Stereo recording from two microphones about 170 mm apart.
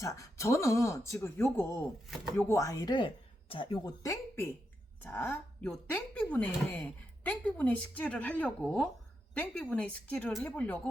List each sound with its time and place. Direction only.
0.0 s speech: 20° left (ahead or behind)
2.5 s speech: 20° left (ahead or behind)